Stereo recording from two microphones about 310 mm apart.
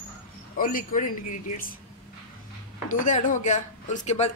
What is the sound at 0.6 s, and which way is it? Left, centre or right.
Speech, left.